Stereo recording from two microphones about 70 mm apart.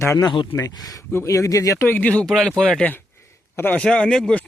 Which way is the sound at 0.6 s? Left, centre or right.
Left.